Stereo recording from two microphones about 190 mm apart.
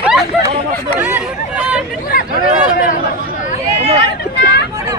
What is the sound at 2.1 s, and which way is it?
Hubbub, 50° left (ahead or behind).